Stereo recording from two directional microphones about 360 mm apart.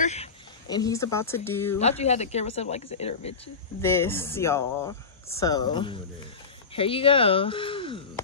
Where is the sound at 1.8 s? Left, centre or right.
Centre.